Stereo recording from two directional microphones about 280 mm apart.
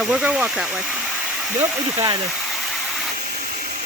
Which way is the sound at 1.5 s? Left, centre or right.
Centre.